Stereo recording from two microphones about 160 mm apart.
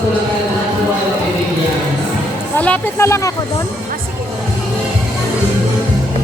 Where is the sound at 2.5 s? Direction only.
10° left (ahead or behind).